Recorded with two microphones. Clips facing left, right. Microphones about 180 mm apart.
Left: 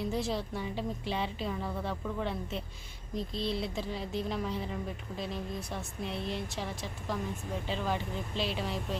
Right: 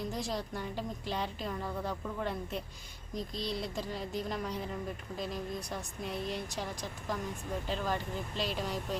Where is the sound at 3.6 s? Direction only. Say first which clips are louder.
Left 2 dB; centre (ahead or behind).